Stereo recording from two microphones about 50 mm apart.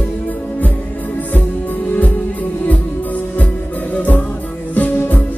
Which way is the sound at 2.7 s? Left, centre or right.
Left.